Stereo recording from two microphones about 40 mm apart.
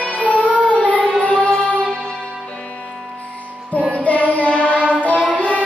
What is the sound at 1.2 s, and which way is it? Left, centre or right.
Music, left.